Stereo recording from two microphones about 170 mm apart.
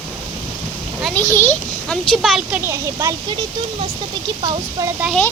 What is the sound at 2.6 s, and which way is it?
Speech, 15° right (ahead or behind).